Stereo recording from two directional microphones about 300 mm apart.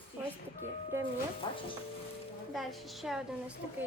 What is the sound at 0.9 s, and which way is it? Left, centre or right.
Speech, centre.